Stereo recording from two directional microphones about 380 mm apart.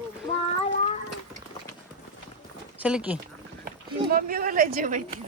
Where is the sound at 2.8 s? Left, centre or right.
Centre.